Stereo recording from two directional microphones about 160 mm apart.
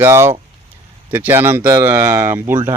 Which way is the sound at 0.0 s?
15° right (ahead or behind).